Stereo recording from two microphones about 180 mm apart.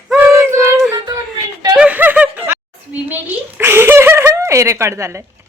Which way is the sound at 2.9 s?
10° right (ahead or behind).